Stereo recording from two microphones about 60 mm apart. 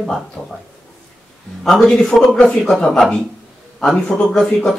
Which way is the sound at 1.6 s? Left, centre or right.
Centre.